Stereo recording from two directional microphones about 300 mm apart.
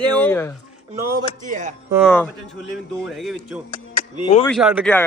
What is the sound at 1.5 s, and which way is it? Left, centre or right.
Speech, right.